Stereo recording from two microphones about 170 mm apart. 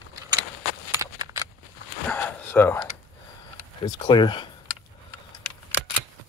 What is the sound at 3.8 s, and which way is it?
Speech, 25° left (ahead or behind).